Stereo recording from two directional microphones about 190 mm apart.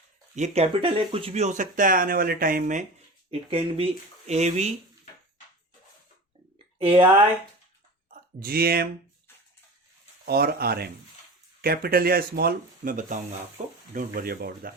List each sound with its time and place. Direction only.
0.3 s speech: 35° right (ahead or behind)
3.5 s speech: 30° right (ahead or behind)
6.7 s speech: 30° right (ahead or behind)
8.1 s speech: 50° right (ahead or behind)
10.2 s speech: 55° right (ahead or behind)